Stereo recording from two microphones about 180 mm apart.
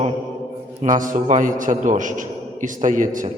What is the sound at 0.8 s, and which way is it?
A man's voice, 45° right (ahead or behind).